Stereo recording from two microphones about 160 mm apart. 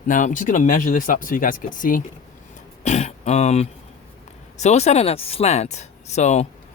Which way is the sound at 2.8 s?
45° left (ahead or behind).